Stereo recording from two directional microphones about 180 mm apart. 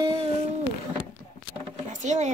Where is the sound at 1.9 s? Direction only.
40° right (ahead or behind).